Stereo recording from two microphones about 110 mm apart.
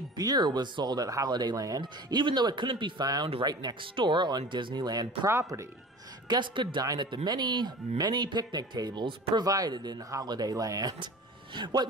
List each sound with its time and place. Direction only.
0.2 s speech: 40° right (ahead or behind)
6.2 s speech: 45° right (ahead or behind)